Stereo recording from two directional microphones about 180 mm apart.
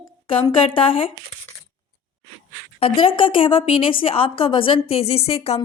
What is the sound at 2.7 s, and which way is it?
A woman's voice, 30° left (ahead or behind).